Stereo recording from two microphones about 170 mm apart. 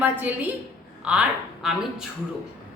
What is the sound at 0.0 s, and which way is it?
A woman's voice, 10° right (ahead or behind).